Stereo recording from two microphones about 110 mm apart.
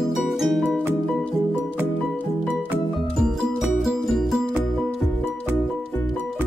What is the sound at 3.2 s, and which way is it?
Music, 5° right (ahead or behind).